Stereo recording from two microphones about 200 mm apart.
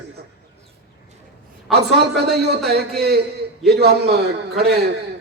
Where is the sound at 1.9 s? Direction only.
55° right (ahead or behind).